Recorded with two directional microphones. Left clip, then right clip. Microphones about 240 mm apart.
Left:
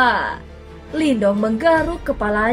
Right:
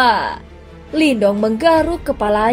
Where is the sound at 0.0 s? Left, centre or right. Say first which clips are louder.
Right 2 dB; right.